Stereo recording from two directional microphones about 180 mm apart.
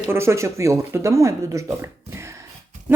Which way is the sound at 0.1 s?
15° right (ahead or behind).